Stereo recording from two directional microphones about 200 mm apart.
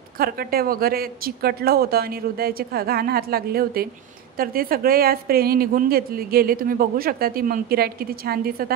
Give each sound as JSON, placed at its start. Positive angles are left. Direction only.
{"t": 0.2, "sound": "a woman's voice", "side_deg": -50}